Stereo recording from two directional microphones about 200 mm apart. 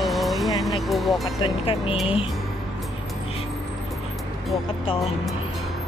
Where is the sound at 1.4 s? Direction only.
25° left (ahead or behind).